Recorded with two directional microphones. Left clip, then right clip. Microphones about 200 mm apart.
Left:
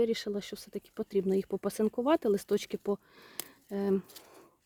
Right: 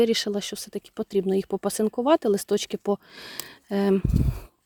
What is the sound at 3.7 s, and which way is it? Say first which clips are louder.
Speech: right 8 dB; 35° right (ahead or behind).